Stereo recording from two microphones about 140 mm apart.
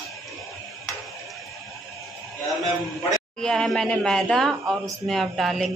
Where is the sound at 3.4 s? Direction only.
5° left (ahead or behind).